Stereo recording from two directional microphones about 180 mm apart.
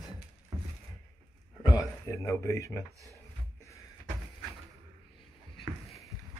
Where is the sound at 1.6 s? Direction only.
20° left (ahead or behind).